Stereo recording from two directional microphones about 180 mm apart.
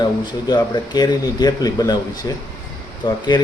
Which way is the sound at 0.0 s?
25° left (ahead or behind).